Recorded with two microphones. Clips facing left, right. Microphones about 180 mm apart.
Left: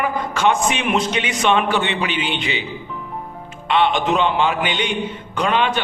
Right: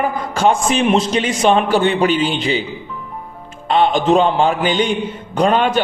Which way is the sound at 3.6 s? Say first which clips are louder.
Right 4 dB; 40° right (ahead or behind).